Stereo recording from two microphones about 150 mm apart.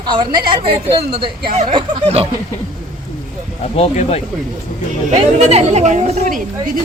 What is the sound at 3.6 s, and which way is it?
Speech, 45° left (ahead or behind).